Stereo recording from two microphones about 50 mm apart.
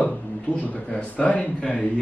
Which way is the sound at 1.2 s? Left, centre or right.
Left.